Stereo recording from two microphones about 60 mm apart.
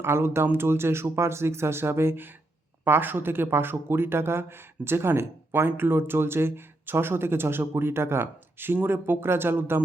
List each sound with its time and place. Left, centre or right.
0.0 s speech: right